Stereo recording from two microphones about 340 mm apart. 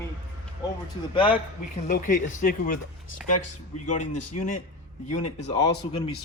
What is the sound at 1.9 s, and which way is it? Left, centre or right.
Speech, left.